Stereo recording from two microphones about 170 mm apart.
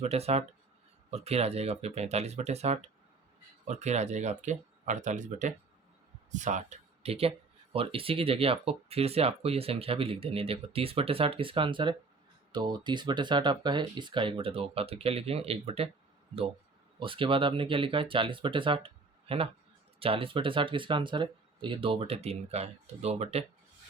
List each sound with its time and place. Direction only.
0.0 s speech: 40° right (ahead or behind)
17.0 s speech: 30° right (ahead or behind)
20.0 s speech: 35° right (ahead or behind)